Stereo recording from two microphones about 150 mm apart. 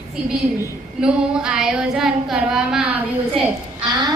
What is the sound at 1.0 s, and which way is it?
Female singing, 5° right (ahead or behind).